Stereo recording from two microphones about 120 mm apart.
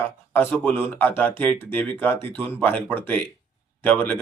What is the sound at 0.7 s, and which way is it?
Speech, 15° left (ahead or behind).